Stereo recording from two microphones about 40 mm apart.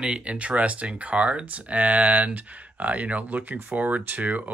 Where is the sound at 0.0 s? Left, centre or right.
Right.